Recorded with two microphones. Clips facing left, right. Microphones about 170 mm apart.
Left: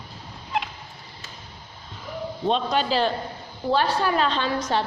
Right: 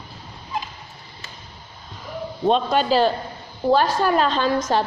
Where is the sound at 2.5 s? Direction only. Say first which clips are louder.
Right 5 dB; 50° right (ahead or behind).